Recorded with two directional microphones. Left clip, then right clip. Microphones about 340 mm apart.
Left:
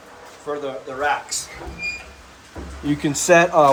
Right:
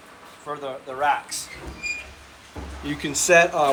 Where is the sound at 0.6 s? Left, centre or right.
Centre.